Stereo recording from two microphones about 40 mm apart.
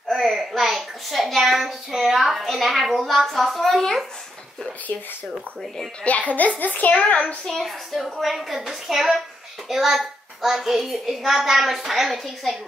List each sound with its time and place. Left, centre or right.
0.1 s a child's voice: centre
6.0 s a child's voice: left
7.4 s a child's voice: centre